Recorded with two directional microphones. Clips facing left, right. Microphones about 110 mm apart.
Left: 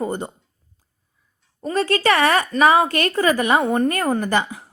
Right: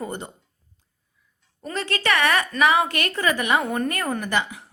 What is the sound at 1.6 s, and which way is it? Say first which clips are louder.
A woman's voice: left 7 dB; 30° left (ahead or behind).